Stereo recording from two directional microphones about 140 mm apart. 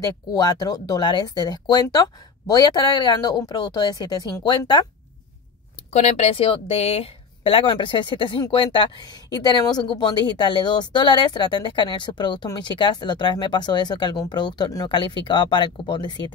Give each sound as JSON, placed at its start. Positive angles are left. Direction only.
{"t": 0.0, "sound": "speech", "side_deg": 30}
{"t": 5.9, "sound": "a woman's voice", "side_deg": 50}